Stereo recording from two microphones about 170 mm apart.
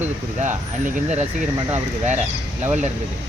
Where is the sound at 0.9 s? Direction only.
40° right (ahead or behind).